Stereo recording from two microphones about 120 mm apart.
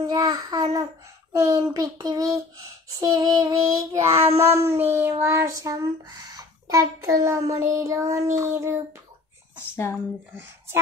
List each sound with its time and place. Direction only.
0.0 s child singing: 30° right (ahead or behind)